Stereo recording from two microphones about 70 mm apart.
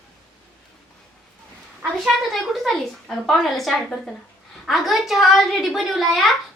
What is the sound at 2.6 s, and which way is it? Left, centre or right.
A child's voice, centre.